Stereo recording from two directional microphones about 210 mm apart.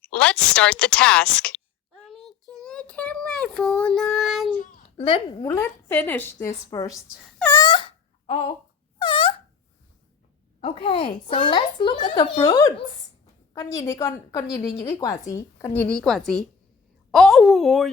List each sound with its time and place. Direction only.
0.0 s a woman's voice: 5° left (ahead or behind)
2.0 s child singing: centre (ahead or behind)
4.5 s a child's voice: 30° left (ahead or behind)
5.5 s a woman's voice: 10° left (ahead or behind)
7.3 s wail: 10° left (ahead or behind)
10.6 s a woman's voice: 25° left (ahead or behind); by 17.9 s centre (ahead or behind)